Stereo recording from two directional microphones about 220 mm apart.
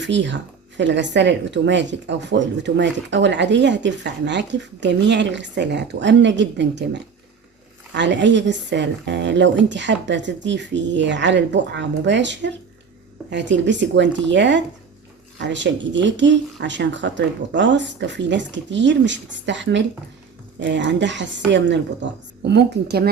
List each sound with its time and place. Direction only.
0.0 s speech: 55° right (ahead or behind)